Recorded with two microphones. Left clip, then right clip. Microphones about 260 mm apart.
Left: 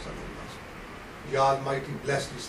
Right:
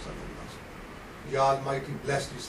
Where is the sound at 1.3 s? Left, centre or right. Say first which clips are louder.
Left 1 dB; centre.